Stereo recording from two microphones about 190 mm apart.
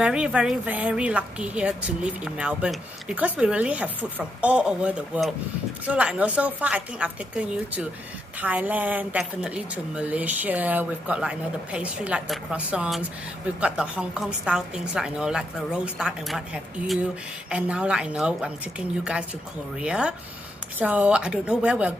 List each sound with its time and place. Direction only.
0.0 s a woman's voice: 5° right (ahead or behind)
19.8 s a woman's voice: 5° right (ahead or behind)